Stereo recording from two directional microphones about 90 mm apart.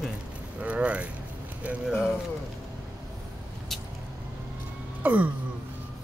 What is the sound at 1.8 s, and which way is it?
Speech, 5° right (ahead or behind).